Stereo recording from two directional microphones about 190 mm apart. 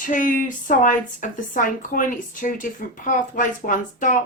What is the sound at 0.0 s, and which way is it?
Speech, 45° left (ahead or behind).